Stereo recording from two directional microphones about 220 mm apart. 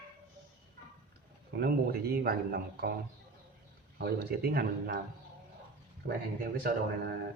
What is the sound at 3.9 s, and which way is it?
A man's voice, 45° right (ahead or behind).